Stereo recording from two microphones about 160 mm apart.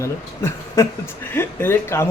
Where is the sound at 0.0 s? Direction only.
15° left (ahead or behind).